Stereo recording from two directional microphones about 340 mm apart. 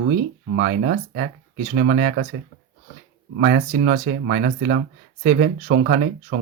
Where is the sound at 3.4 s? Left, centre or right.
Right.